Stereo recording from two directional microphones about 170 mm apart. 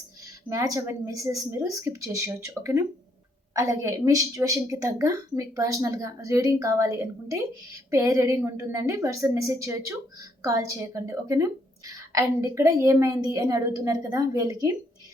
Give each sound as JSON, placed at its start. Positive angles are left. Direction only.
{"t": 0.4, "sound": "a woman's voice", "side_deg": -20}